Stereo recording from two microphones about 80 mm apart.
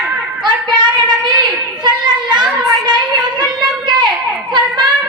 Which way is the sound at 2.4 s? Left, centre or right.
Centre.